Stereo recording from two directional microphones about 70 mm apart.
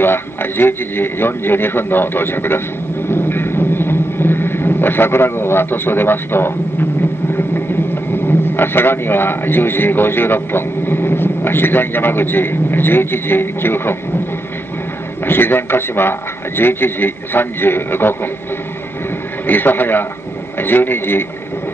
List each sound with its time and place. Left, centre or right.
0.0 s a man's voice: left
3.1 s vehicle: left
7.3 s speech: left
15.2 s a man's voice: left
19.4 s a man's voice: left